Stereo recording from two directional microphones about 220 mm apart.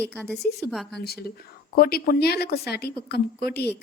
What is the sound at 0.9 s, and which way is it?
A woman's voice, 45° left (ahead or behind).